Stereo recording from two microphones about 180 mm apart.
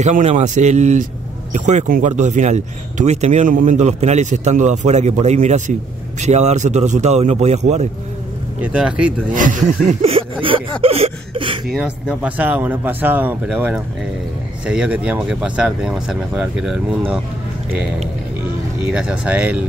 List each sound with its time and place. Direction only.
0.0 s speech: 40° right (ahead or behind)
8.5 s speech: 5° right (ahead or behind)
9.3 s speech: 45° right (ahead or behind)
9.8 s speech: 35° right (ahead or behind)
11.6 s speech: 5° right (ahead or behind)
18.9 s speech: 5° right (ahead or behind)